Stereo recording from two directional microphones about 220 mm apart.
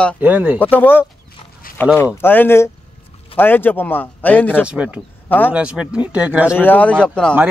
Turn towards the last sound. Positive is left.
turn(degrees=5)  # may be behind; listen again after turning